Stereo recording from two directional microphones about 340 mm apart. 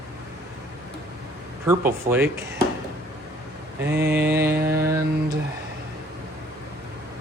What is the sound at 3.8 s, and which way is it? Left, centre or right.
Speech, right.